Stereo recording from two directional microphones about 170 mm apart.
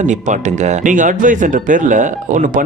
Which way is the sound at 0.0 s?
45° right (ahead or behind).